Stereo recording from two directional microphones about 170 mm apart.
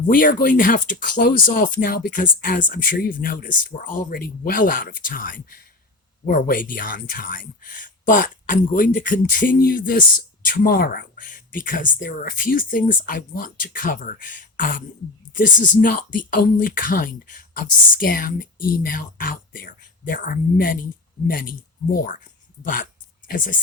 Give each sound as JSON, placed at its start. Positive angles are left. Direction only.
{"t": 0.1, "sound": "speech", "side_deg": 55}